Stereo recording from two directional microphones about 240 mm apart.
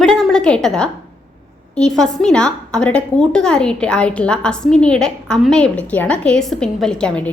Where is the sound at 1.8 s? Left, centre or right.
Centre.